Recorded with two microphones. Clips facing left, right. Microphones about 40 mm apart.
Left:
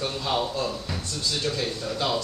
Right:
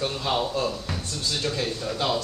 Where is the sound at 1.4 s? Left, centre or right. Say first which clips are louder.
Right 1 dB; centre.